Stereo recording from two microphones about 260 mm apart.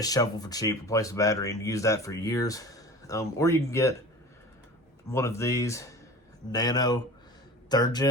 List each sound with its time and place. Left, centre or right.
0.0 s speech: centre
5.1 s speech: centre